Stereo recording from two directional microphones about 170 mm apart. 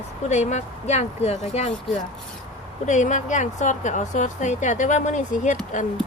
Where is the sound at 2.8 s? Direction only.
45° left (ahead or behind).